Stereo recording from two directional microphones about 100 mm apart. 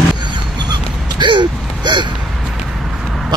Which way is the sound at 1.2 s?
50° right (ahead or behind).